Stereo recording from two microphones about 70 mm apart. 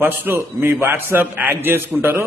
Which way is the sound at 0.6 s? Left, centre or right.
Right.